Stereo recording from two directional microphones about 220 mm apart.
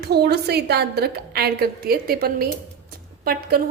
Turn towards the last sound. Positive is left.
turn(degrees=-45)  # may be behind; listen again after turning